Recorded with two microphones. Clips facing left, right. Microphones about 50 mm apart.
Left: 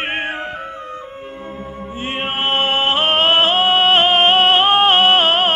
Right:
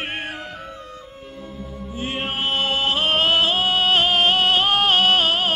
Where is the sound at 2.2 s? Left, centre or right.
Left.